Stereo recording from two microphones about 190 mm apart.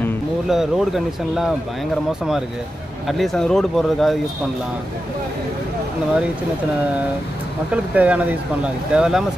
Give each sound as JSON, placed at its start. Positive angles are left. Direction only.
{"t": 0.5, "sound": "speech", "side_deg": 0}
{"t": 3.1, "sound": "speech", "side_deg": 0}
{"t": 7.7, "sound": "speech", "side_deg": -5}